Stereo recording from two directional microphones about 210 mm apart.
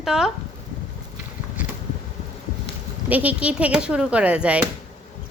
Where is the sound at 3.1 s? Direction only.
5° right (ahead or behind).